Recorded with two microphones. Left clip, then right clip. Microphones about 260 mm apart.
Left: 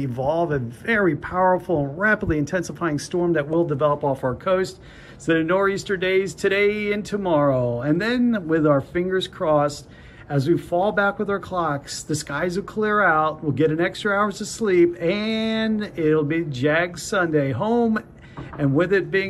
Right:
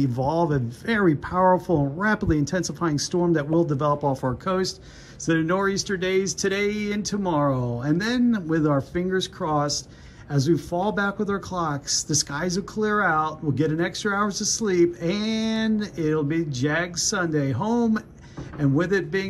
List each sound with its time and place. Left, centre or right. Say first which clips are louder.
0.5 s speech: left 3 dB; centre